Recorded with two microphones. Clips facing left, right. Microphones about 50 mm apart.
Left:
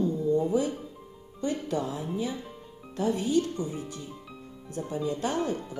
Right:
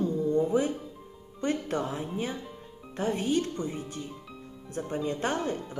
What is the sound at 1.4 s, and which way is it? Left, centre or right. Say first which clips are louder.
A woman's voice: even; right.